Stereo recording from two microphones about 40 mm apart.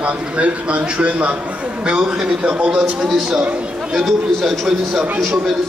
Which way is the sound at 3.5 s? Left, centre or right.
Right.